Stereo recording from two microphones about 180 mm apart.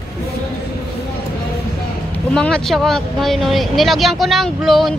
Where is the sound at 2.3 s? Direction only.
5° left (ahead or behind).